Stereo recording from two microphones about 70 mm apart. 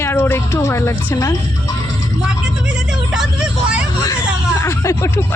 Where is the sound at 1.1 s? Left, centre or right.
Left.